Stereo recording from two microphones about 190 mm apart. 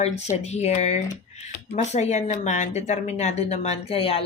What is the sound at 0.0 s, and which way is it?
Speech, 35° left (ahead or behind).